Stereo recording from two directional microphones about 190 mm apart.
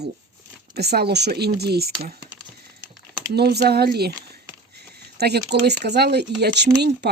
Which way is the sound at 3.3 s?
60° right (ahead or behind).